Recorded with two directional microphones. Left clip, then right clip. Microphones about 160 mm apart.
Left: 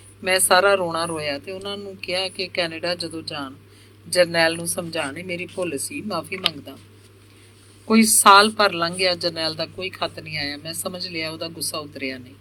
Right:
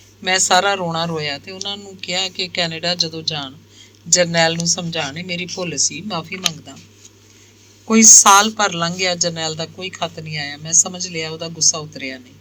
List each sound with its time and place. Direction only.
0.2 s speech: 25° right (ahead or behind)
7.9 s speech: 25° right (ahead or behind)